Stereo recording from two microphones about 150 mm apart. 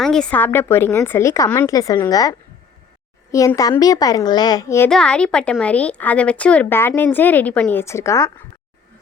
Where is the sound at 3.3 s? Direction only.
20° left (ahead or behind).